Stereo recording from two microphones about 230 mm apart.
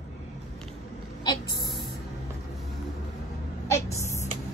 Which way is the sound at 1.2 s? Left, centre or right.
Centre.